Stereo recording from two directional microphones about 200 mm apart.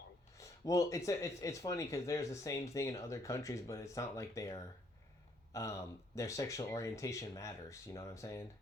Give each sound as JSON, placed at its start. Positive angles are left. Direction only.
{"t": 0.3, "sound": "speech", "side_deg": 15}